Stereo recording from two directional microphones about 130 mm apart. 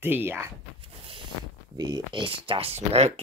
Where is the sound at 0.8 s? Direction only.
45° right (ahead or behind).